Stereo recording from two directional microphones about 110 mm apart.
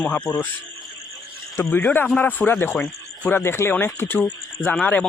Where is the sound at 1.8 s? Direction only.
15° left (ahead or behind).